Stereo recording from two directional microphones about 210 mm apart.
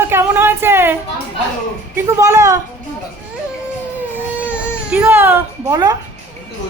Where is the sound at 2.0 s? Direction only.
15° right (ahead or behind).